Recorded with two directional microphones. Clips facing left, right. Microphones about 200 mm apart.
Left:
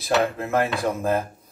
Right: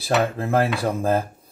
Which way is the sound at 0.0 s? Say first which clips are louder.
Right 1 dB; 30° right (ahead or behind).